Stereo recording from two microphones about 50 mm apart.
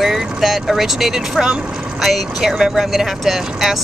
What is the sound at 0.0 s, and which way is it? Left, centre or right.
Speech, centre.